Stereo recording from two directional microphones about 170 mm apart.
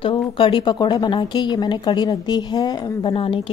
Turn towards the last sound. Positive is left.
turn(degrees=30)  # may be behind; listen again after turning